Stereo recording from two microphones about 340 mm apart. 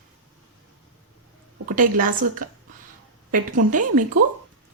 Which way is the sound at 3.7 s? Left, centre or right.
Right.